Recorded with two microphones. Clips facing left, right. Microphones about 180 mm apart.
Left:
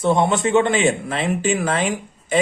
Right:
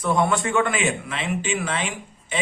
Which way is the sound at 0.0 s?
25° left (ahead or behind).